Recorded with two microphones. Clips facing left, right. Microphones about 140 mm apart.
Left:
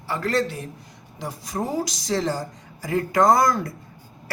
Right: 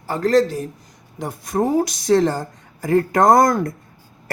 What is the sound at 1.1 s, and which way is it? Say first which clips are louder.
Speech: right 7 dB; 55° right (ahead or behind).